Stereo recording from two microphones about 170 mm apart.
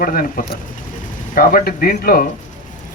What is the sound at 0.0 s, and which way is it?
Speech, 55° left (ahead or behind).